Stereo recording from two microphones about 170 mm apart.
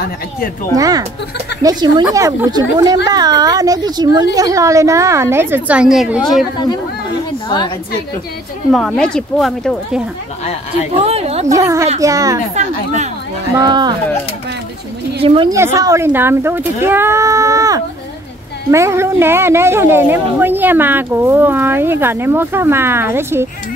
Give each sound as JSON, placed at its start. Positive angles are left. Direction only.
{"t": 0.7, "sound": "a woman's voice", "side_deg": -20}
{"t": 7.4, "sound": "a woman's voice", "side_deg": 25}
{"t": 8.7, "sound": "speech", "side_deg": 5}
{"t": 11.0, "sound": "a woman's voice", "side_deg": -35}
{"t": 11.4, "sound": "a woman's voice", "side_deg": -20}
{"t": 12.5, "sound": "speech", "side_deg": -45}
{"t": 13.6, "sound": "a woman's voice", "side_deg": -25}
{"t": 15.2, "sound": "a woman's voice", "side_deg": -30}
{"t": 15.5, "sound": "a woman's voice", "side_deg": -15}